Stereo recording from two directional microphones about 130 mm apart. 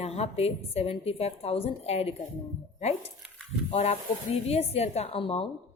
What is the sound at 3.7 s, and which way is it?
A woman's voice, 55° left (ahead or behind).